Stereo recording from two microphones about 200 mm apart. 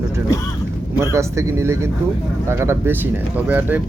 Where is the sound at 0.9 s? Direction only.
15° right (ahead or behind).